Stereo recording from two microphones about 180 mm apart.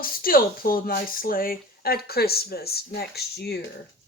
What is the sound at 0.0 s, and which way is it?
Speech, 55° left (ahead or behind).